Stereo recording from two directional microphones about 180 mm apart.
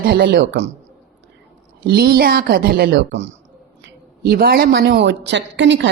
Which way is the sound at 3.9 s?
60° right (ahead or behind).